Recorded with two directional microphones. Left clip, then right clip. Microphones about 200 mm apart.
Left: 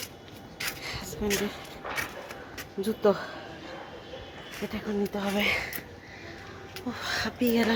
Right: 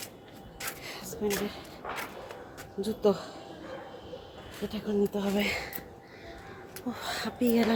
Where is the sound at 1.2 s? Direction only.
40° left (ahead or behind).